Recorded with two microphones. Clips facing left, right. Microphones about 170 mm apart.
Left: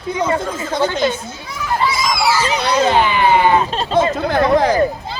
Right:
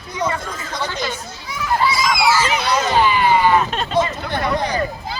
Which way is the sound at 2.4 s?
30° left (ahead or behind).